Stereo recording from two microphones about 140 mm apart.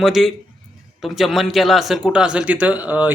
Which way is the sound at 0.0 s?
Centre (ahead or behind).